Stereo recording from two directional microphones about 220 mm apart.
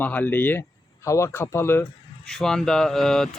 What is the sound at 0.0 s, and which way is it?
Speech, 10° left (ahead or behind).